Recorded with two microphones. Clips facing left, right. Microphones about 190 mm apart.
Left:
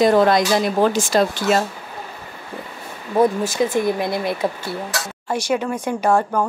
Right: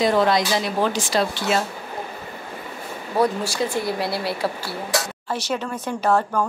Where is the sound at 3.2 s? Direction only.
20° left (ahead or behind).